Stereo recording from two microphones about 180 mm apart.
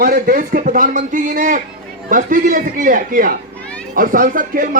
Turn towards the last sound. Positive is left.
turn(degrees=-50)  # may be behind; listen again after turning